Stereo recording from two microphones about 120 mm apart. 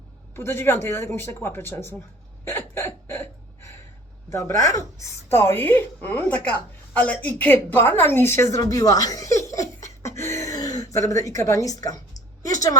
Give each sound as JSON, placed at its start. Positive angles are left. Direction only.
{"t": 0.3, "sound": "speech", "side_deg": 20}
{"t": 2.4, "sound": "hiccup", "side_deg": 20}
{"t": 4.3, "sound": "a woman's voice", "side_deg": 25}
{"t": 8.6, "sound": "laughter", "side_deg": 30}